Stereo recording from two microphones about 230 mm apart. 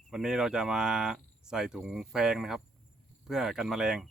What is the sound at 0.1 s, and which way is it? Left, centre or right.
Speech, centre.